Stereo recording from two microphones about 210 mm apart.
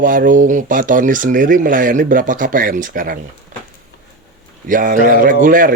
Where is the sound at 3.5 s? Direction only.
40° right (ahead or behind).